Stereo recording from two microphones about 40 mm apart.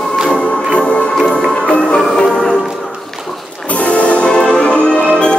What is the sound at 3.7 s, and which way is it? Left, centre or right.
Music, left.